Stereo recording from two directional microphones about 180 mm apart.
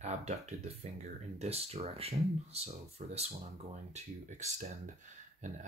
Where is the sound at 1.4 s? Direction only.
35° right (ahead or behind).